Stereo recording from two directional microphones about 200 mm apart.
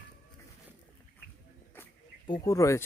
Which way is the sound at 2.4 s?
15° left (ahead or behind).